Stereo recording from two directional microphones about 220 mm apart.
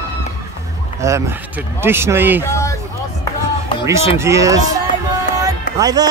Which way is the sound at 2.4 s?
15° left (ahead or behind).